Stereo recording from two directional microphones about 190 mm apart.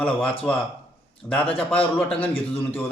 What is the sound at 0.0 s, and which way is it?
Speech, 5° left (ahead or behind).